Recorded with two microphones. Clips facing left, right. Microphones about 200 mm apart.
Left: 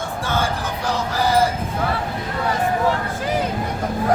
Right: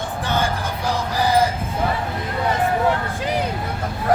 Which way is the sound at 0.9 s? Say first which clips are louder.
Even; 15° right (ahead or behind).